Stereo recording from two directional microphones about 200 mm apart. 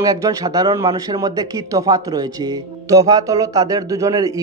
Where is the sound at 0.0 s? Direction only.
15° right (ahead or behind).